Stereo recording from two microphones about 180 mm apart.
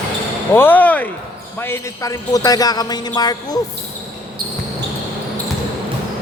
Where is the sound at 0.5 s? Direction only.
10° left (ahead or behind).